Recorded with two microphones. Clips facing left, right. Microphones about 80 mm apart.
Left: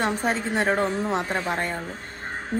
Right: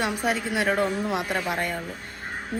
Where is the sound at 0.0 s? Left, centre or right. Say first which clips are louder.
Left 1 dB; left.